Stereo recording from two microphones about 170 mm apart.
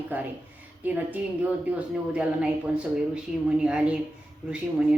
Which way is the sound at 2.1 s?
5° right (ahead or behind).